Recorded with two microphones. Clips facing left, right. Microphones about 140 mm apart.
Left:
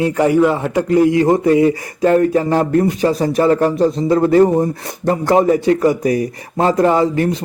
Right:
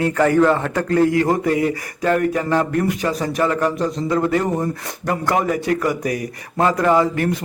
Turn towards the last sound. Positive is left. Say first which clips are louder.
# left 3 dB
turn(degrees=25)  # may be behind; listen again after turning